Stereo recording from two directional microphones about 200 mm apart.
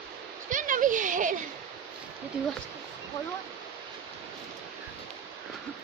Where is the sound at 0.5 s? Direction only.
40° right (ahead or behind).